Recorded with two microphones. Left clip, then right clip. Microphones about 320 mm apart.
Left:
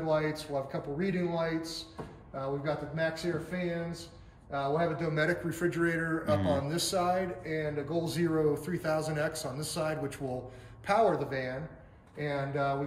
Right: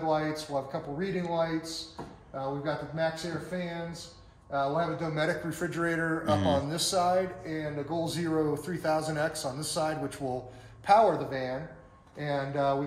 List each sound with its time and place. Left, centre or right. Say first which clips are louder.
0.0 s speech: right 1 dB; centre